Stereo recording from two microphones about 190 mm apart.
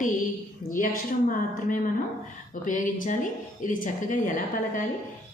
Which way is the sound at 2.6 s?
45° left (ahead or behind).